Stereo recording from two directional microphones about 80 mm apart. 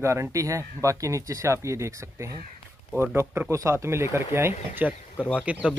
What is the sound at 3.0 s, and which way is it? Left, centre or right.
Speech, right.